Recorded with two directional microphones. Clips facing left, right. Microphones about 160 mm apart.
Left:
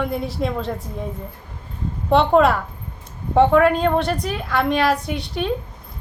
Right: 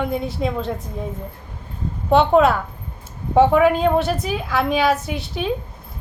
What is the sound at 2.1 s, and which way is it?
A woman's voice, centre (ahead or behind).